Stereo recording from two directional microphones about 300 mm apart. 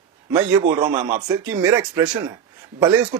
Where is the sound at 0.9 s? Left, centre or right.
Right.